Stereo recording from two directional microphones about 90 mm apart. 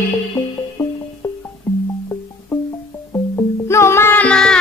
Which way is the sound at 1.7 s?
20° left (ahead or behind).